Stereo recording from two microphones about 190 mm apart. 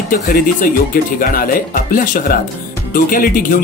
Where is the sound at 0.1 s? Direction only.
45° left (ahead or behind).